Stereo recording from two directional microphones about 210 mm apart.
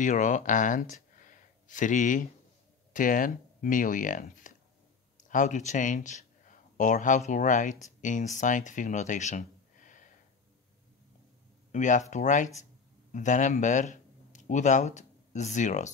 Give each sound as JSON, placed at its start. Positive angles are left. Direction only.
{"t": 0.0, "sound": "speech", "side_deg": 35}
{"t": 11.7, "sound": "speech", "side_deg": 35}